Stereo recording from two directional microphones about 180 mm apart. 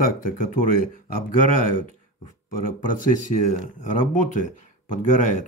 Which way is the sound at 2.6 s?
50° left (ahead or behind).